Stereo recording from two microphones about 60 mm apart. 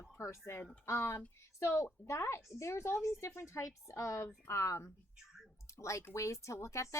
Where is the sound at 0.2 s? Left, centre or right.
Left.